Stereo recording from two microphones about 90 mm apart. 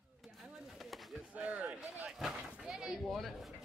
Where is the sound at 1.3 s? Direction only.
10° right (ahead or behind).